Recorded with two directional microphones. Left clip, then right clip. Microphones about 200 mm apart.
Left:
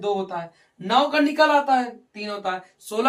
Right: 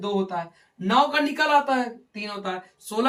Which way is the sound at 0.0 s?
20° left (ahead or behind).